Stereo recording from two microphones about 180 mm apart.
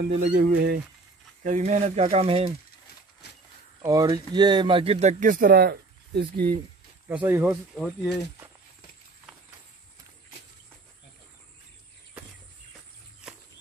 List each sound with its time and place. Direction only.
0.2 s speech: 60° right (ahead or behind)
1.4 s speech: 40° right (ahead or behind)
3.8 s speech: 20° right (ahead or behind); by 6.5 s 60° right (ahead or behind)
7.1 s speech: 10° right (ahead or behind)
7.7 s speech: 5° left (ahead or behind)